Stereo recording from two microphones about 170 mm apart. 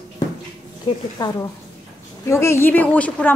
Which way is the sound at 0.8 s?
20° left (ahead or behind).